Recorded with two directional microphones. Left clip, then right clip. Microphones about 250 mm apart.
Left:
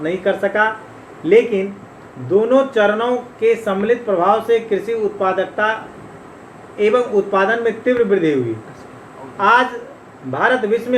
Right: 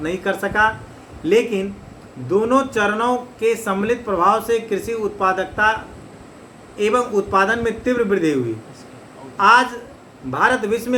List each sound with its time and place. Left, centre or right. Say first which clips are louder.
0.0 s speech: left 4 dB; right
6.7 s speech: left 3 dB; right
9.4 s speech: even; right